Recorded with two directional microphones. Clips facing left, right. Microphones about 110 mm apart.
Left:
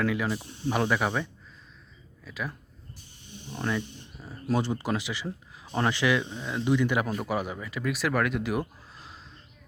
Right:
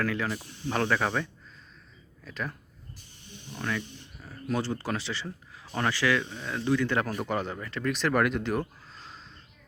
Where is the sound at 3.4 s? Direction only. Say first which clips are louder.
Left 3 dB; 25° left (ahead or behind).